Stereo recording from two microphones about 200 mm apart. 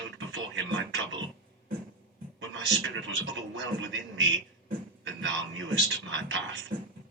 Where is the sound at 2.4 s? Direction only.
70° right (ahead or behind).